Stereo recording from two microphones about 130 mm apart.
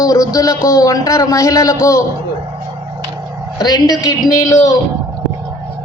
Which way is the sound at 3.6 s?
30° left (ahead or behind).